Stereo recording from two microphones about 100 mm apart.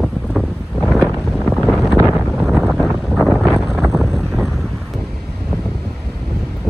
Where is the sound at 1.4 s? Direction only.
Centre (ahead or behind).